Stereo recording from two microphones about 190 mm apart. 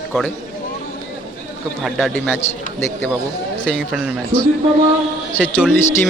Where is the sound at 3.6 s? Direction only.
5° left (ahead or behind).